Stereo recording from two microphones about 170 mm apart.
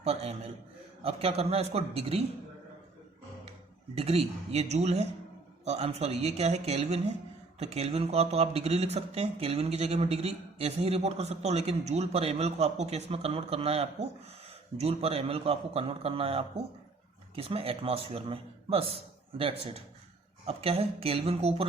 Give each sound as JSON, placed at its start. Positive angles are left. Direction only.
{"t": 0.0, "sound": "speech", "side_deg": -40}
{"t": 3.9, "sound": "speech", "side_deg": -35}